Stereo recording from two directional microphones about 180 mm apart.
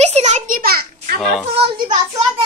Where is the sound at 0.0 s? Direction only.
40° right (ahead or behind); by 1.1 s 55° right (ahead or behind).